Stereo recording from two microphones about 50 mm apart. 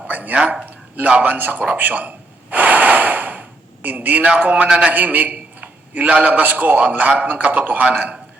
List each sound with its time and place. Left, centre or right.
0.1 s a sound: right
3.8 s a man's voice: right
4.9 s a man's voice: right